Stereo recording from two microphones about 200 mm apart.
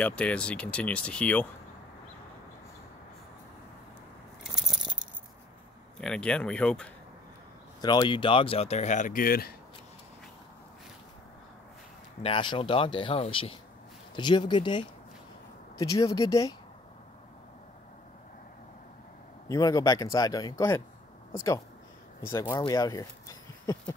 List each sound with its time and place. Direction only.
0.0 s speech: 5° left (ahead or behind)
4.4 s keys jangling: centre (ahead or behind)
5.9 s speech: 5° left (ahead or behind)
7.8 s speech: 20° left (ahead or behind); by 9.5 s 45° left (ahead or behind)
12.2 s speech: 25° left (ahead or behind)
19.4 s speech: 20° left (ahead or behind)
22.3 s speech: 20° left (ahead or behind)